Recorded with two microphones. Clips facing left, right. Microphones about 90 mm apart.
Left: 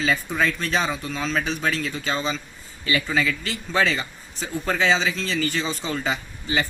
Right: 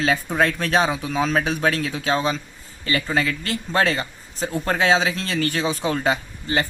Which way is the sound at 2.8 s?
50° right (ahead or behind).